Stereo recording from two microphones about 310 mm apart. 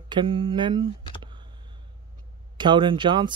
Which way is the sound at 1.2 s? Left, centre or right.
Centre.